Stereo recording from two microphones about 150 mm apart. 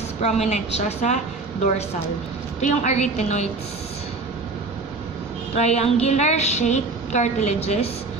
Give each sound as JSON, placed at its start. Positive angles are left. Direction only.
{"t": 0.2, "sound": "a woman's voice", "side_deg": 50}
{"t": 2.6, "sound": "a woman's voice", "side_deg": 50}
{"t": 5.5, "sound": "a woman's voice", "side_deg": 45}